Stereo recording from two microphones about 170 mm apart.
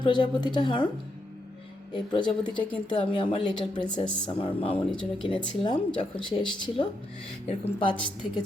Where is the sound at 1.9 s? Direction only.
25° left (ahead or behind).